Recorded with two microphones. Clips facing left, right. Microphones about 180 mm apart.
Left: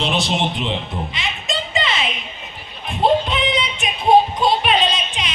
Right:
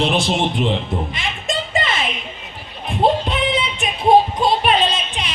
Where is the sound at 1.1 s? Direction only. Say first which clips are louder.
Right 2 dB; 50° right (ahead or behind).